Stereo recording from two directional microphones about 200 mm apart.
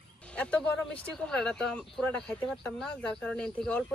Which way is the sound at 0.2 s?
5° left (ahead or behind).